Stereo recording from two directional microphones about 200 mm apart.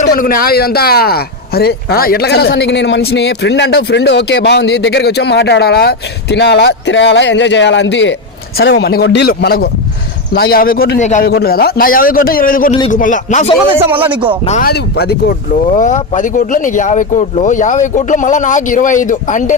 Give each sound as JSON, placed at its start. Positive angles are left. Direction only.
{"t": 0.0, "sound": "a man's voice", "side_deg": 45}
{"t": 11.0, "sound": "speech", "side_deg": 35}
{"t": 11.3, "sound": "a man's voice", "side_deg": 50}
{"t": 13.8, "sound": "speech", "side_deg": -10}
{"t": 14.6, "sound": "a man's voice", "side_deg": 50}
{"t": 15.7, "sound": "speech", "side_deg": 40}